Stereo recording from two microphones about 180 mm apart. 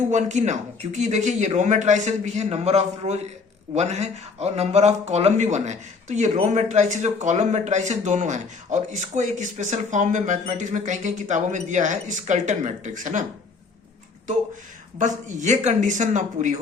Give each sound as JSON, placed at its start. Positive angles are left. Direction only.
{"t": 0.1, "sound": "speech", "side_deg": -40}
{"t": 14.9, "sound": "speech", "side_deg": -45}